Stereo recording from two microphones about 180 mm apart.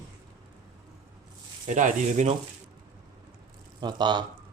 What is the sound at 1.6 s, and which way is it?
Speech, 45° right (ahead or behind).